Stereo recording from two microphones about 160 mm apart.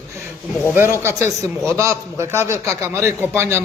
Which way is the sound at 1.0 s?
20° right (ahead or behind).